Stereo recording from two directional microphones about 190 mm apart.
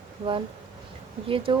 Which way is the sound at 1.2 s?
30° right (ahead or behind).